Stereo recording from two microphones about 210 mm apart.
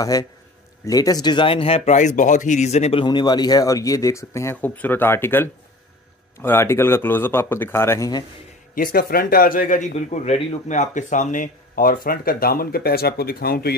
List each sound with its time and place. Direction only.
0.0 s speech: 15° left (ahead or behind)
8.7 s speech: 45° left (ahead or behind)